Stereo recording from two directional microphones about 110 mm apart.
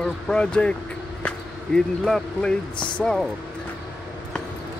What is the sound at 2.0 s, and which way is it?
Speech, 5° left (ahead or behind).